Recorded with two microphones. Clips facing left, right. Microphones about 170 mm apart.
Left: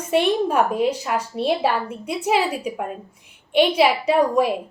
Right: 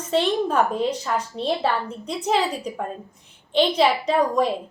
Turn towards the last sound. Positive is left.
turn(degrees=10)  # may be behind; listen again after turning